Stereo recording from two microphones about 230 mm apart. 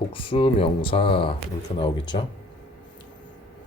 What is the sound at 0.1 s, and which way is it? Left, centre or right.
Speech, left.